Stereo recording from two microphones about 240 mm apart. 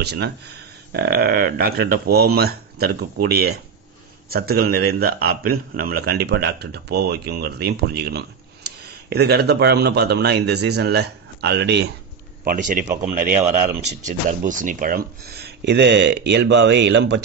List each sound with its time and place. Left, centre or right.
0.0 s a man's voice: right
12.4 s a man's voice: right